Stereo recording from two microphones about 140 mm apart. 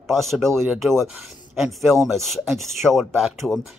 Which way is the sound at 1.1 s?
5° right (ahead or behind).